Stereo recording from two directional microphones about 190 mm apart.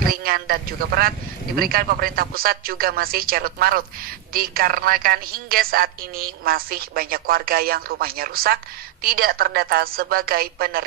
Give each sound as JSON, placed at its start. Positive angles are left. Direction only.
{"t": 0.0, "sound": "a man's voice", "side_deg": -50}